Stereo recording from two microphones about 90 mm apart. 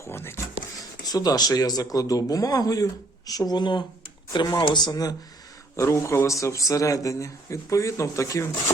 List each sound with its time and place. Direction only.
0.0 s a sound: 25° left (ahead or behind)
0.8 s speech: 45° left (ahead or behind)
5.7 s speech: 35° left (ahead or behind)